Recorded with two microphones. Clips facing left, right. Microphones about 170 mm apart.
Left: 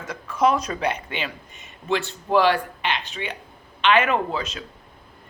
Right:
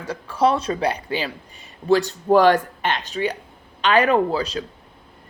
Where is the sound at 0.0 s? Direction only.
30° right (ahead or behind).